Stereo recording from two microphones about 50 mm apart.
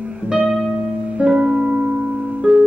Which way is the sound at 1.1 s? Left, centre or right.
Centre.